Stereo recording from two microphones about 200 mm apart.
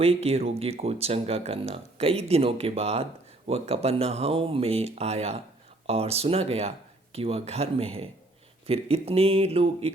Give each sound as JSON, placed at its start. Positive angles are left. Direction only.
{"t": 0.0, "sound": "speech", "side_deg": -30}